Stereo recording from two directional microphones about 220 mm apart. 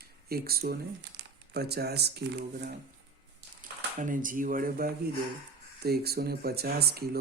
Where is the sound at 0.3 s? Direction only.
45° right (ahead or behind).